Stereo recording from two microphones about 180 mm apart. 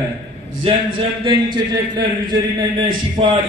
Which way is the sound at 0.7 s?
30° right (ahead or behind).